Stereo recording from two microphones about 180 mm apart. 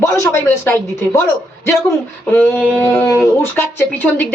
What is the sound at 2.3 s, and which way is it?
Speech, 10° left (ahead or behind).